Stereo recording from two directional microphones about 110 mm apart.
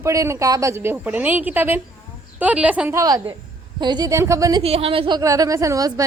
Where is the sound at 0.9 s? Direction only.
15° right (ahead or behind).